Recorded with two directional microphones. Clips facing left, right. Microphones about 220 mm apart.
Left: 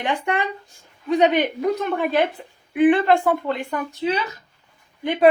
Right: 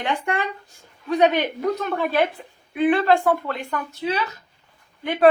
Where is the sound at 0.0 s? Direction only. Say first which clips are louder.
Left 1 dB; 20° left (ahead or behind).